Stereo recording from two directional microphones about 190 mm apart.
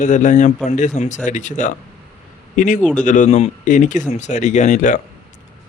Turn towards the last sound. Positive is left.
turn(degrees=40)  # may be behind; listen again after turning